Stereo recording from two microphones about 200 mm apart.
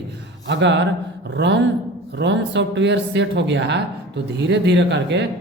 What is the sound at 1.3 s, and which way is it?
Speech, 65° right (ahead or behind).